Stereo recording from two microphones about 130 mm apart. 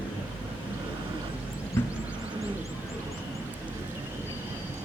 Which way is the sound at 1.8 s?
15° left (ahead or behind).